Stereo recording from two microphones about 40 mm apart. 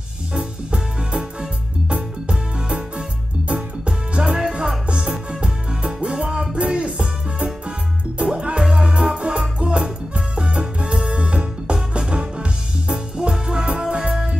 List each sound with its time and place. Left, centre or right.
0.3 s music: right
1.9 s music: right
5.0 s music: centre